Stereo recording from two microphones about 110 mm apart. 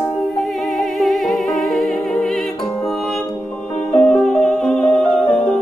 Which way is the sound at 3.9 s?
10° left (ahead or behind).